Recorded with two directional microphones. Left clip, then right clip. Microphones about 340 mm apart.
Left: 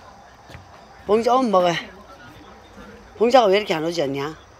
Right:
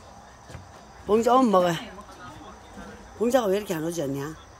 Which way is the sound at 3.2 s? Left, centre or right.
Centre.